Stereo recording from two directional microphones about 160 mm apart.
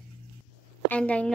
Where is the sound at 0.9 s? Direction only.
10° left (ahead or behind).